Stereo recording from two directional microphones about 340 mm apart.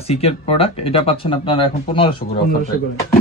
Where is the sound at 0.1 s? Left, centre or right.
Centre.